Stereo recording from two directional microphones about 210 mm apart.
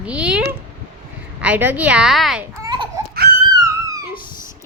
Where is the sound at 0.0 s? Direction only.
5° right (ahead or behind).